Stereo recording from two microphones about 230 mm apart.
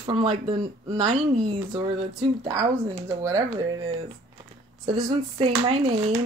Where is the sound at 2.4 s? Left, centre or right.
Centre.